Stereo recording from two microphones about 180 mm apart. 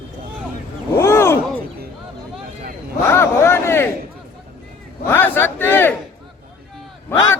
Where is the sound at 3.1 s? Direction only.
15° left (ahead or behind).